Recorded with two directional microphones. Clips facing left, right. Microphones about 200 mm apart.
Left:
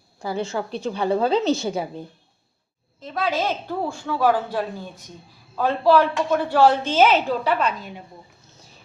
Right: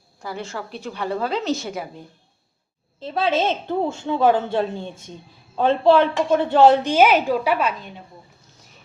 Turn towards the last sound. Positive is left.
turn(degrees=-5)  # may be behind; listen again after turning